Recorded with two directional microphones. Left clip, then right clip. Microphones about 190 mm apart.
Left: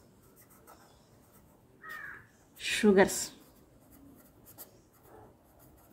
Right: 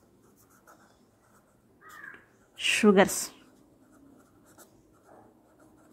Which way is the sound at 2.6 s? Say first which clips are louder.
Right 3 dB; 40° right (ahead or behind).